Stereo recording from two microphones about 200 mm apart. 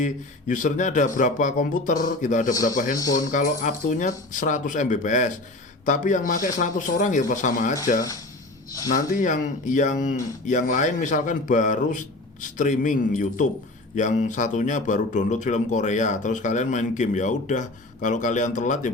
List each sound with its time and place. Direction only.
0.0 s a man's voice: 40° left (ahead or behind)
7.9 s speech: 15° left (ahead or behind)
8.9 s speech: 40° left (ahead or behind)